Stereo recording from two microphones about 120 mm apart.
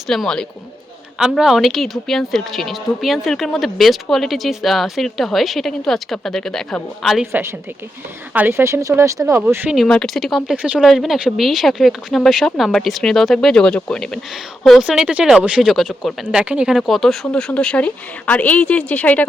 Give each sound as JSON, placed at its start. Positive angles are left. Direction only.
{"t": 0.1, "sound": "speech", "side_deg": 5}
{"t": 8.3, "sound": "speech", "side_deg": -15}
{"t": 9.6, "sound": "speech", "side_deg": 0}
{"t": 14.6, "sound": "a woman's voice", "side_deg": -5}